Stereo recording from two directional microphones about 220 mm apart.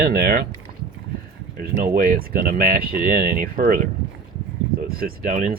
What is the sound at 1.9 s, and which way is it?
Speech, 40° right (ahead or behind).